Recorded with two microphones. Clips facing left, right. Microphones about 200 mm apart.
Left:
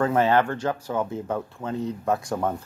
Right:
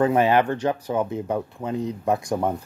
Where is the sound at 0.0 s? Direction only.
15° right (ahead or behind).